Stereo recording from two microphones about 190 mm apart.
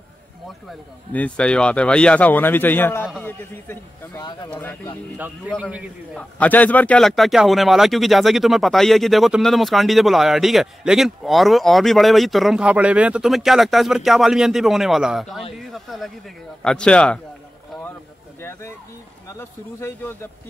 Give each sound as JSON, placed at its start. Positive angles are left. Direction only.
{"t": 0.7, "sound": "speech", "side_deg": 5}
{"t": 4.2, "sound": "speech", "side_deg": 25}
{"t": 4.5, "sound": "speech", "side_deg": 10}
{"t": 5.5, "sound": "a man's voice", "side_deg": -5}
{"t": 6.1, "sound": "speech", "side_deg": 10}
{"t": 18.4, "sound": "a sound", "side_deg": 10}
{"t": 19.2, "sound": "speech", "side_deg": 15}